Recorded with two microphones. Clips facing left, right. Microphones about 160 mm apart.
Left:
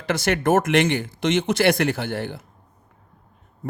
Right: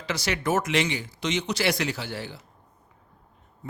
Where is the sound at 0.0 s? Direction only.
55° left (ahead or behind).